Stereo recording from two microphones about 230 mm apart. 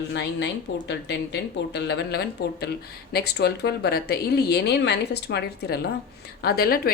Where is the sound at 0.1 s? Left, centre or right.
Left.